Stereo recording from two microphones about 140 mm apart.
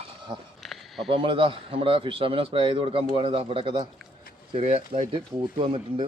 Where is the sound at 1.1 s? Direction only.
40° right (ahead or behind).